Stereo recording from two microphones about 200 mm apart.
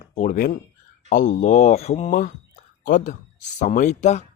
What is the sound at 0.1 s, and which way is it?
A man's voice, 45° left (ahead or behind).